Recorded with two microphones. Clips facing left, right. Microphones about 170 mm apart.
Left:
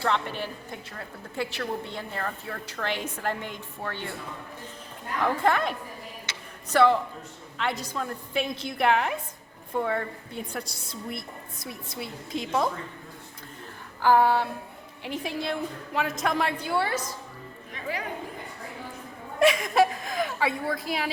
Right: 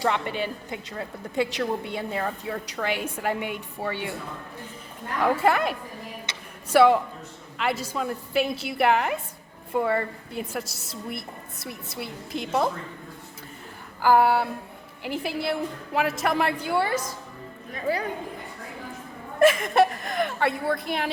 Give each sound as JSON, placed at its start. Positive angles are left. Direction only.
{"t": 0.0, "sound": "a woman's voice", "side_deg": -15}
{"t": 5.2, "sound": "a woman's voice", "side_deg": -5}
{"t": 14.0, "sound": "a woman's voice", "side_deg": -10}
{"t": 16.6, "sound": "a woman's voice", "side_deg": -50}
{"t": 17.7, "sound": "dog", "side_deg": -35}
{"t": 19.4, "sound": "a woman's voice", "side_deg": 0}